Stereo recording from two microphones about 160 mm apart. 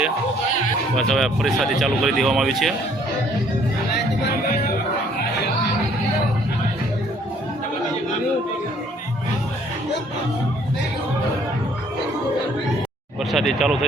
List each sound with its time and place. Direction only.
0.9 s speech: centre (ahead or behind)
13.3 s speech: centre (ahead or behind)